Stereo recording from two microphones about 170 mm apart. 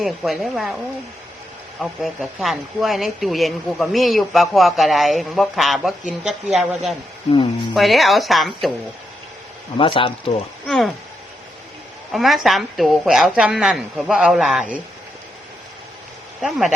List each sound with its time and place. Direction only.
0.0 s speech: centre (ahead or behind)
1.8 s speech: centre (ahead or behind)
9.7 s speech: 30° left (ahead or behind)
10.7 s speech: centre (ahead or behind)
12.1 s speech: centre (ahead or behind)